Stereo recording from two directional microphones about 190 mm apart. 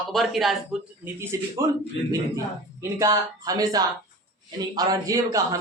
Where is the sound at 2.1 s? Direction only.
15° right (ahead or behind).